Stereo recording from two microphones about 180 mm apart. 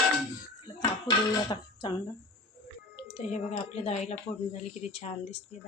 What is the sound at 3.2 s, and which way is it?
Speech, 40° left (ahead or behind).